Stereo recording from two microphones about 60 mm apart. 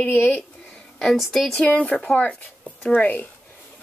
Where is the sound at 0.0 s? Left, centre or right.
Left.